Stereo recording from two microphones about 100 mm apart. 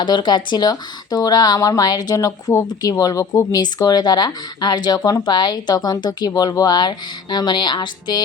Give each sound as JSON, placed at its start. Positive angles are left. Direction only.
{"t": 0.0, "sound": "speech", "side_deg": 50}